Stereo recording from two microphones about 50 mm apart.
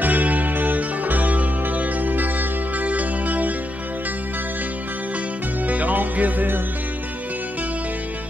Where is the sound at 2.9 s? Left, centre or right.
Right.